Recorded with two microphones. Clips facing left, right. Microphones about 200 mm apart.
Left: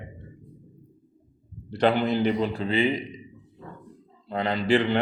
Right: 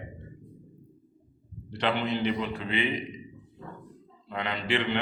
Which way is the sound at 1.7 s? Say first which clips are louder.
Left 6 dB; 40° left (ahead or behind).